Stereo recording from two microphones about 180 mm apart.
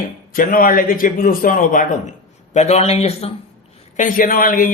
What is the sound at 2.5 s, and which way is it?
Speech, 35° left (ahead or behind).